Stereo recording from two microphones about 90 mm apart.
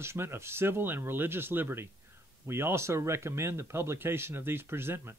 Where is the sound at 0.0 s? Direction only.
30° right (ahead or behind).